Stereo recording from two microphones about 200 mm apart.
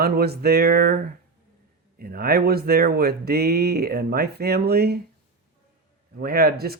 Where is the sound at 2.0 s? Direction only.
50° right (ahead or behind).